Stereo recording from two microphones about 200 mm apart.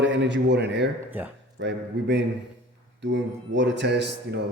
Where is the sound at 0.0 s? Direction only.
65° right (ahead or behind).